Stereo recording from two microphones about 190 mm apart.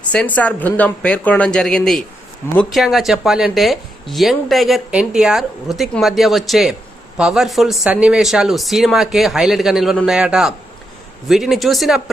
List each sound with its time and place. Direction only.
0.1 s speech: 5° left (ahead or behind)